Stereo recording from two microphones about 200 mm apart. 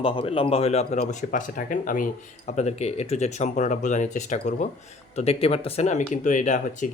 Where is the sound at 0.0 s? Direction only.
25° left (ahead or behind).